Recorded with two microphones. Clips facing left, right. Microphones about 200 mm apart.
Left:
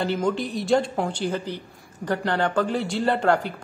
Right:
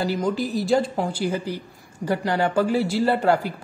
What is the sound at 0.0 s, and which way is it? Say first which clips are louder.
A man's voice: right 1 dB; centre (ahead or behind).